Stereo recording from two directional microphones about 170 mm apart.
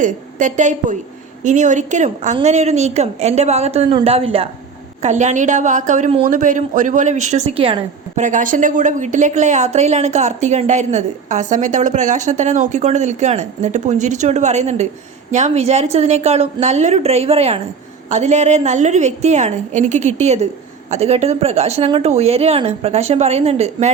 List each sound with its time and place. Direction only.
0.0 s a woman's voice: 50° right (ahead or behind)
5.0 s a woman's voice: 45° right (ahead or behind)
8.1 s a woman's voice: 50° right (ahead or behind)